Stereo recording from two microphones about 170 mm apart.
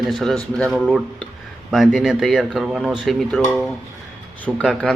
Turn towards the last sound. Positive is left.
turn(degrees=5)  # may be behind; listen again after turning